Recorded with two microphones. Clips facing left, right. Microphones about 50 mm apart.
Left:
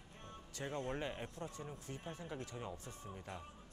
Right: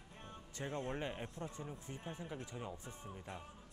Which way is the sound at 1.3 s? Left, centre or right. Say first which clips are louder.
Right 1 dB; right.